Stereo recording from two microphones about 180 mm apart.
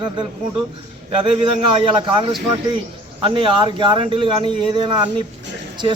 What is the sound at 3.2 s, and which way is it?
A man's voice, 30° right (ahead or behind).